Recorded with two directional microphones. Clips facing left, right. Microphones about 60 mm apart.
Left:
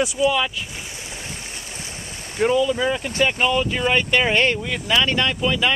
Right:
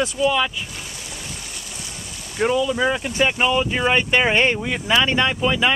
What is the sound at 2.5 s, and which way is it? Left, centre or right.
Speech, centre.